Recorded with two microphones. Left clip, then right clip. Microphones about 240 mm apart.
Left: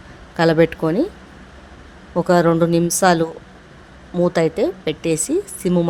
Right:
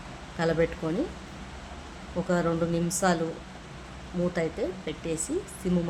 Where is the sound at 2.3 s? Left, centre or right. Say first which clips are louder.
Left 12 dB; left.